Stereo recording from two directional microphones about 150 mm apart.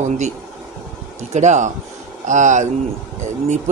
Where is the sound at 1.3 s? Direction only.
50° right (ahead or behind).